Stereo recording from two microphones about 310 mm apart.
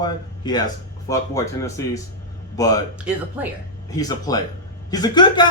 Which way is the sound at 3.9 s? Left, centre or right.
Centre.